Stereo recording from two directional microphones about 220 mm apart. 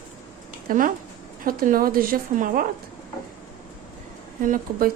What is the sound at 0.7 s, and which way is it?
A woman's voice, 40° right (ahead or behind).